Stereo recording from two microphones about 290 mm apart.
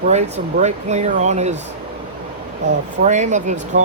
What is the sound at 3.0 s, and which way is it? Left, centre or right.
Speech, right.